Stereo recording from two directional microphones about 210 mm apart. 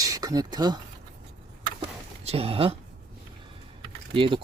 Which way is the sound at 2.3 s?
30° right (ahead or behind).